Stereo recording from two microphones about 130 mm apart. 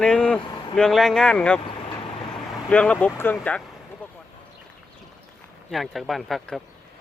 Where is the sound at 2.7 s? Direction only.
10° left (ahead or behind).